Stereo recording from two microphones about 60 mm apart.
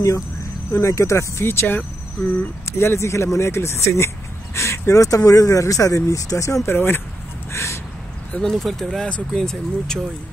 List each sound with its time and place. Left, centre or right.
0.7 s speech: left
6.7 s speech: left
7.5 s a sound: left
8.4 s speech: centre